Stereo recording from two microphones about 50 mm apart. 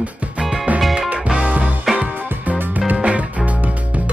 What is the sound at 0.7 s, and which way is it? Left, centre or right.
Music, right.